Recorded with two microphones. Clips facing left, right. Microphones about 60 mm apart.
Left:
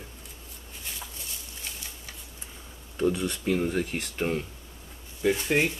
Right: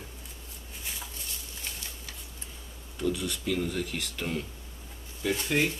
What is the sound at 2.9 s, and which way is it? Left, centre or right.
Speech, left.